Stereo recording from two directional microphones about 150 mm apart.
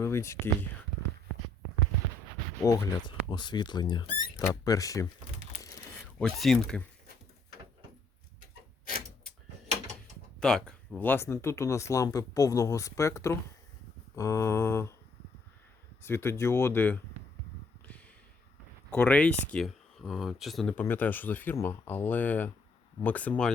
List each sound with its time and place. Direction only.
0.0 s speech: 20° left (ahead or behind)
2.6 s speech: 20° left (ahead or behind)
6.1 s speech: 5° left (ahead or behind)
10.4 s speech: 5° left (ahead or behind)
16.0 s speech: 15° left (ahead or behind)
18.9 s speech: 15° left (ahead or behind)